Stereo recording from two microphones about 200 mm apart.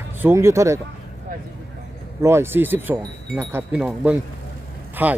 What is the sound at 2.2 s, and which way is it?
Speech, 10° right (ahead or behind).